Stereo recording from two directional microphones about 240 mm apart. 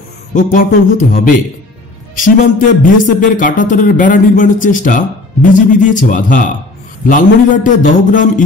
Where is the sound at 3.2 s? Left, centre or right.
Left.